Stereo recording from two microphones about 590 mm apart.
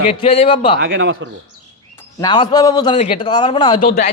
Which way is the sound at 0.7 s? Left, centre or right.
Centre.